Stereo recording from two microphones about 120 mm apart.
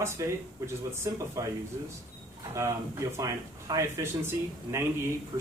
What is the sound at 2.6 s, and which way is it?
Speech, 25° right (ahead or behind).